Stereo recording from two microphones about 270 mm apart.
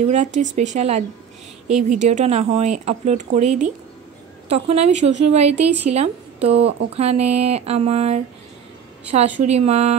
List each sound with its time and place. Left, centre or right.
0.0 s speech: right